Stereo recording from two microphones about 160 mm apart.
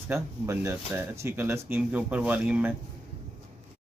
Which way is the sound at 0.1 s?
15° right (ahead or behind).